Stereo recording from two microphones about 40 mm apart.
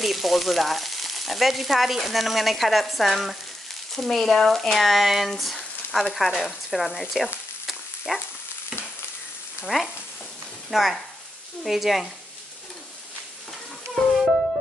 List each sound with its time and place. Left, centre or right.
0.0 s frying: centre
5.3 s speech: centre
8.1 s frying: centre
9.7 s stir: centre
10.7 s speech: centre
11.6 s frying: centre